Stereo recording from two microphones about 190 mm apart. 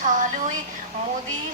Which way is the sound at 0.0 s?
40° right (ahead or behind).